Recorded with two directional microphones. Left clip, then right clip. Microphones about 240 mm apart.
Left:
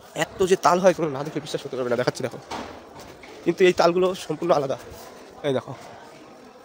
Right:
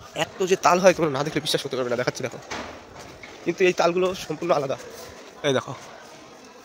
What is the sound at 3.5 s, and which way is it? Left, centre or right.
Speech, centre.